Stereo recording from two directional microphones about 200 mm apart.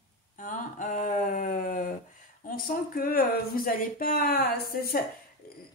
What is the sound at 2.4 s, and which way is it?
Speech, 45° left (ahead or behind).